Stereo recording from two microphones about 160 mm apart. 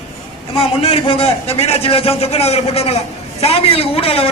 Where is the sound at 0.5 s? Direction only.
35° left (ahead or behind).